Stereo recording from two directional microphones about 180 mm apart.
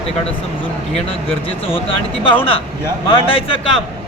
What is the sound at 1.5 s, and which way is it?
Speech, 30° left (ahead or behind).